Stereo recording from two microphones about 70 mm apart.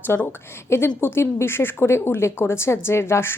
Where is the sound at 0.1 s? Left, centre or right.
Left.